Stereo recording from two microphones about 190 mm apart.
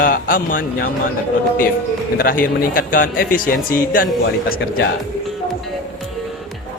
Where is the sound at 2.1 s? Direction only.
50° left (ahead or behind).